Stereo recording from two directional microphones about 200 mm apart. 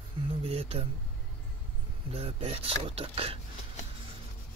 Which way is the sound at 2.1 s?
30° right (ahead or behind).